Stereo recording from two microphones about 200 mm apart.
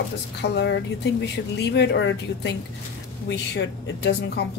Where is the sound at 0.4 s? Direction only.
60° left (ahead or behind).